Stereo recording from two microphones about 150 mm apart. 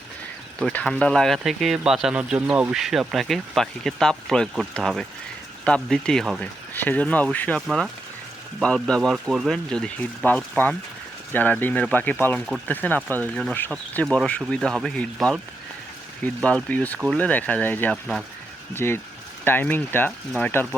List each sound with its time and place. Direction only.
0.6 s speech: 10° left (ahead or behind)
9.7 s speech: 5° left (ahead or behind)